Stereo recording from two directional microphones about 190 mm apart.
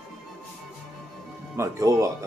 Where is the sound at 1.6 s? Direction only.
15° right (ahead or behind).